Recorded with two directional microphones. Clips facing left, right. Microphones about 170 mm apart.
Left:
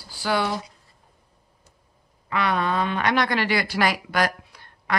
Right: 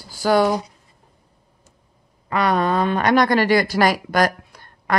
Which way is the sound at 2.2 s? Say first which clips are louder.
Right 5 dB; 40° right (ahead or behind).